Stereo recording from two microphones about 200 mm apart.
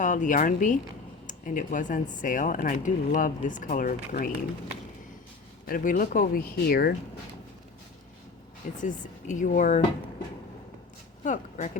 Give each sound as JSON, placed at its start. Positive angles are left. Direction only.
{"t": 0.0, "sound": "speech", "side_deg": 40}
{"t": 5.6, "sound": "speech", "side_deg": 45}
{"t": 8.8, "sound": "speech", "side_deg": 40}
{"t": 11.2, "sound": "speech", "side_deg": 35}